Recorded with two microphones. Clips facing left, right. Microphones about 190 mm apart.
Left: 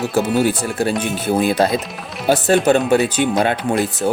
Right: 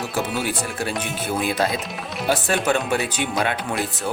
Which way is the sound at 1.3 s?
35° left (ahead or behind).